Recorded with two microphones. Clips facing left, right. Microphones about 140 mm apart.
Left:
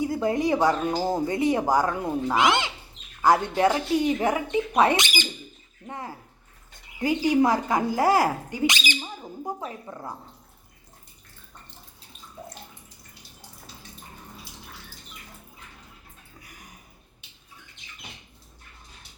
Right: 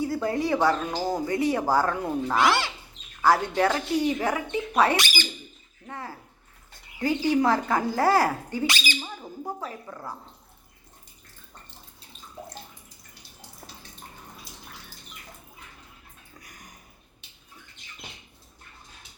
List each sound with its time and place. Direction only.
0.0 s speech: 20° left (ahead or behind)